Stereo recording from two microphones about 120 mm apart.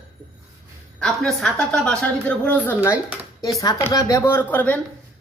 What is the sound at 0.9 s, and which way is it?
A woman's voice, 5° left (ahead or behind).